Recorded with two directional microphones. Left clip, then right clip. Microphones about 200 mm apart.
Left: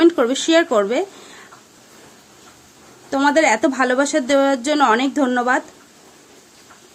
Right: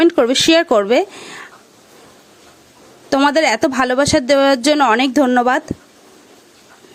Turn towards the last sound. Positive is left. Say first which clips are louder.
# right 4 dB
turn(degrees=-45)  # may be behind; listen again after turning